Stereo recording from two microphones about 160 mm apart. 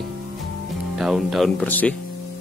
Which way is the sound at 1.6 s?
10° left (ahead or behind).